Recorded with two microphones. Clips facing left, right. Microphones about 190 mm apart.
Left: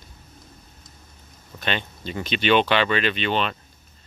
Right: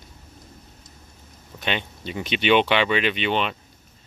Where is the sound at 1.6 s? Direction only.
15° right (ahead or behind).